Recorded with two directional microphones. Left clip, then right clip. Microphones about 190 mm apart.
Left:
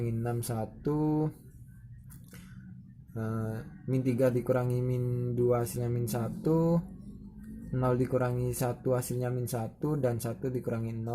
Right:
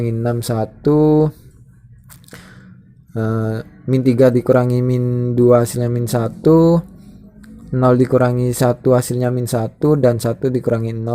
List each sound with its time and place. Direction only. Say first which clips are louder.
0.0 s speech: right 15 dB; 35° right (ahead or behind)
3.2 s speech: right 16 dB; 35° right (ahead or behind)